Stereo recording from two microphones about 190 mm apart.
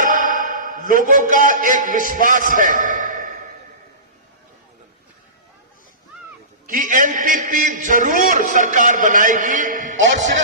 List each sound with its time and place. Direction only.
0.0 s a man's voice: 45° right (ahead or behind)
6.7 s a man's voice: 45° right (ahead or behind)